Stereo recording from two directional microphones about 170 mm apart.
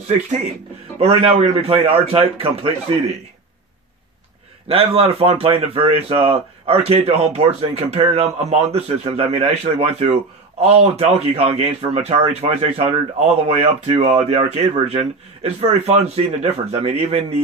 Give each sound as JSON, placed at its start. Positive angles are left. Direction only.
{"t": 0.9, "sound": "speech", "side_deg": -35}
{"t": 4.6, "sound": "speech", "side_deg": -35}